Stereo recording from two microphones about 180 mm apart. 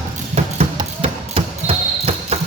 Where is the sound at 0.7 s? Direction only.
30° right (ahead or behind).